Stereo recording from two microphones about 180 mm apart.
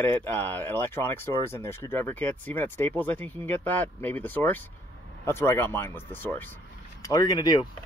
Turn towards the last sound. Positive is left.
turn(degrees=20)  # may be behind; listen again after turning